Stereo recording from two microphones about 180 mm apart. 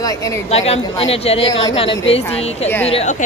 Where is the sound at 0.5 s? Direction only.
35° left (ahead or behind).